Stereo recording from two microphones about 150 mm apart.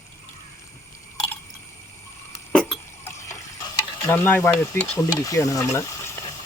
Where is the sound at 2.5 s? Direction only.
5° left (ahead or behind).